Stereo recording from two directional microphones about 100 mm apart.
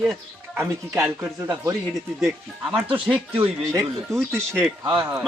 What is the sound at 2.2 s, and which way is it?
Speech, centre (ahead or behind).